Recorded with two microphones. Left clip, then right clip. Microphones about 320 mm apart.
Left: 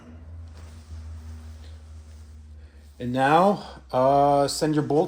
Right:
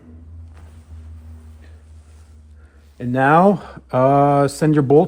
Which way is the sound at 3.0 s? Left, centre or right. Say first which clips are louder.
Right 5 dB; right.